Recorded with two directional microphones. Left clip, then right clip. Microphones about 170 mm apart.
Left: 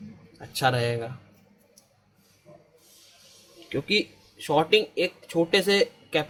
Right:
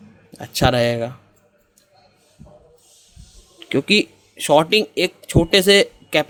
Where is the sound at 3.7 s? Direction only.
80° right; by 6.3 s 60° right (ahead or behind).